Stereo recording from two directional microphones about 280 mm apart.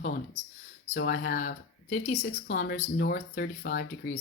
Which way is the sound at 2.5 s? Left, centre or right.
Left.